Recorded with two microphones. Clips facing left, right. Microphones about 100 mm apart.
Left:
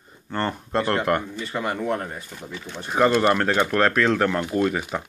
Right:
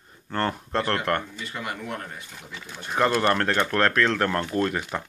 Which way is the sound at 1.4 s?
35° left (ahead or behind).